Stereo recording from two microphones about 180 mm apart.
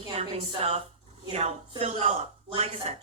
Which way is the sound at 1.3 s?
35° right (ahead or behind).